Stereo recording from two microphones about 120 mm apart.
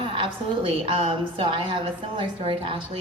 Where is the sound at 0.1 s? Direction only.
45° right (ahead or behind).